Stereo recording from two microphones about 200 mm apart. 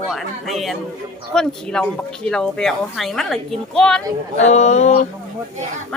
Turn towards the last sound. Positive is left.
turn(degrees=35)  # may be behind; listen again after turning